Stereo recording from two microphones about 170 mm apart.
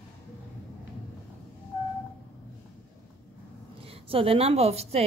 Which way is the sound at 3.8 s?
35° right (ahead or behind).